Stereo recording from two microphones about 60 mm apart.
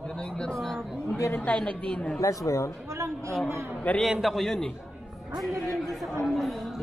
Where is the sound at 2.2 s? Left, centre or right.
Left.